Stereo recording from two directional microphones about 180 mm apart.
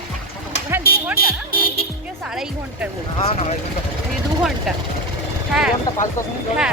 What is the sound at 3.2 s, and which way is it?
Speech, 35° left (ahead or behind).